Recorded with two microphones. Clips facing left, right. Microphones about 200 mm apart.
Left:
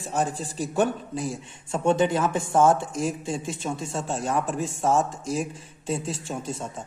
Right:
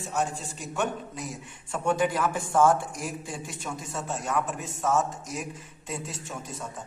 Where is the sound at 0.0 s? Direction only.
35° left (ahead or behind).